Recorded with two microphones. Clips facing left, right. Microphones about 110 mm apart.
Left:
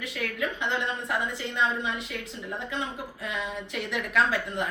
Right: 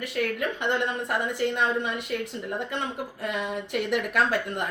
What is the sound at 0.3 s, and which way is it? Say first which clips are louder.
A woman's voice: right 3 dB; 55° right (ahead or behind).